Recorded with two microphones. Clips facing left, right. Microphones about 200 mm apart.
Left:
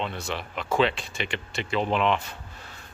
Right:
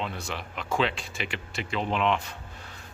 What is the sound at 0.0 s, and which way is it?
Speech, centre (ahead or behind).